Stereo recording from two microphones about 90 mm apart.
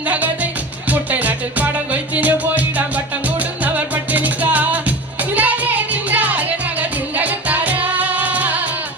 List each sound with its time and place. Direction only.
0.9 s music: 20° right (ahead or behind)